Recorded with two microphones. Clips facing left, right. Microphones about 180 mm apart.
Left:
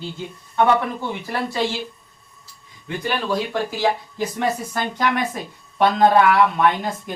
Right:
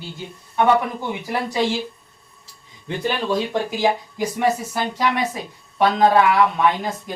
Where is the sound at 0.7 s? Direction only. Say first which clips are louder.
Right 1 dB; 15° right (ahead or behind).